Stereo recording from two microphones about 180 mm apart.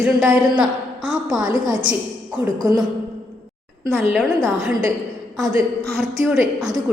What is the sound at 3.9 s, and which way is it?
A woman's voice, centre (ahead or behind).